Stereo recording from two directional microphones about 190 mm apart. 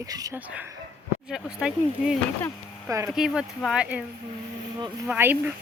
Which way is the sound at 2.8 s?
15° right (ahead or behind).